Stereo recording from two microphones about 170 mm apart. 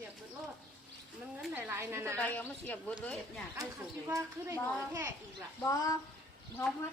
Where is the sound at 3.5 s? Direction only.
20° right (ahead or behind).